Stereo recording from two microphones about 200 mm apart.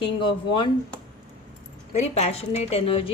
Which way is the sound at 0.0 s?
25° left (ahead or behind).